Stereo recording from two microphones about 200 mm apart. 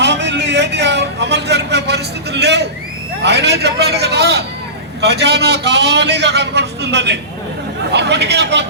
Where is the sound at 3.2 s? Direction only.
55° right (ahead or behind).